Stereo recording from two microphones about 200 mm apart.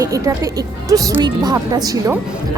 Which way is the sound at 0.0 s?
15° right (ahead or behind).